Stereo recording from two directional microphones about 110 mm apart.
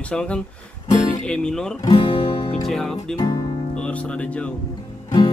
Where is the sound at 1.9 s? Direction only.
55° left (ahead or behind).